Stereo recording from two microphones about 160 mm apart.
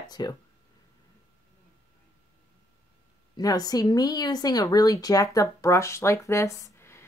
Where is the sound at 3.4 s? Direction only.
25° left (ahead or behind).